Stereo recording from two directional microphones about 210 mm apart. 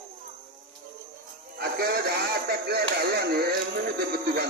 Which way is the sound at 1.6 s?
45° right (ahead or behind).